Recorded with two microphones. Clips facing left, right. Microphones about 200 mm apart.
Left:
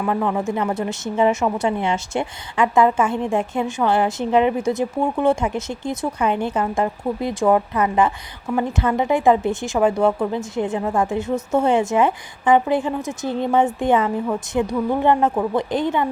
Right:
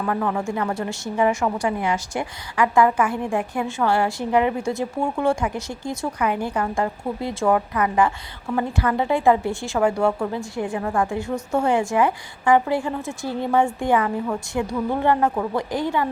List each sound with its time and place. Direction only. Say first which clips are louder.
0.0 s a woman's voice: left 3 dB; 15° left (ahead or behind)